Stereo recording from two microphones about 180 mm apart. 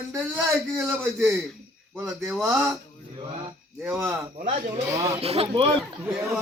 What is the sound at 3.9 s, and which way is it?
Speech, 15° right (ahead or behind).